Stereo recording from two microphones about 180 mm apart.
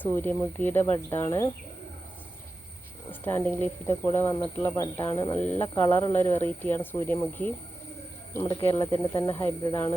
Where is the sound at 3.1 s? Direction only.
10° left (ahead or behind).